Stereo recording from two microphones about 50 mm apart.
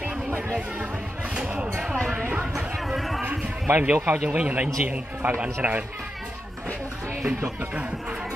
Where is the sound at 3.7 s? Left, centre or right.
Right.